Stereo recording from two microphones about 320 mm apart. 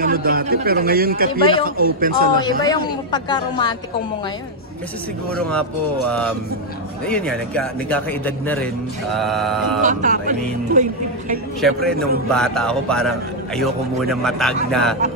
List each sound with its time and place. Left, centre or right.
0.0 s speech: right
3.1 s a woman's voice: centre
5.3 s a man's voice: centre
9.8 s speech: right
11.6 s a man's voice: centre